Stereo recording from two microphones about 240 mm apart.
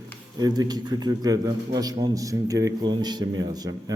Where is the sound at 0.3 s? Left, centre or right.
Centre.